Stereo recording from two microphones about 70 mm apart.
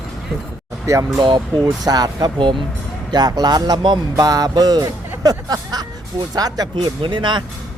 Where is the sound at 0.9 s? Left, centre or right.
Right.